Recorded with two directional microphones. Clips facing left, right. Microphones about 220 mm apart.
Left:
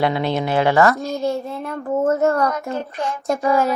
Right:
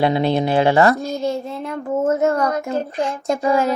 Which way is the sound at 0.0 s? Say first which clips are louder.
Right 3 dB; 30° right (ahead or behind).